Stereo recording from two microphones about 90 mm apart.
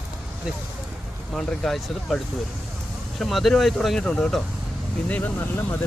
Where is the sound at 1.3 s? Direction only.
5° left (ahead or behind).